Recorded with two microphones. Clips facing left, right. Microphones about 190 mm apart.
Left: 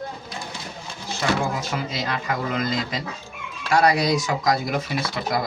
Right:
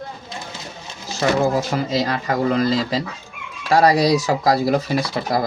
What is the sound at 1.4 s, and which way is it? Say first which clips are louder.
Speech: right 7 dB; 35° right (ahead or behind).